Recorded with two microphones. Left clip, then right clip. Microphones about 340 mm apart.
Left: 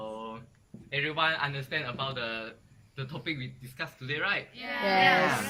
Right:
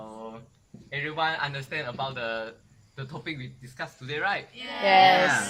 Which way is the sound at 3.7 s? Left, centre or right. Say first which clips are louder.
Right 1 dB; centre.